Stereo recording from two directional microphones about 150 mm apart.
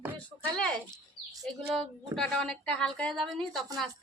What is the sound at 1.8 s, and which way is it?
A woman's voice, 5° left (ahead or behind).